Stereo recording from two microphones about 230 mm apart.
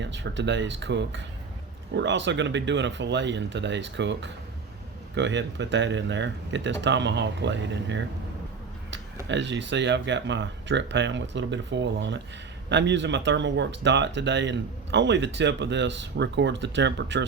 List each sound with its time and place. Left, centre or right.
0.0 s speech: right
9.2 s speech: right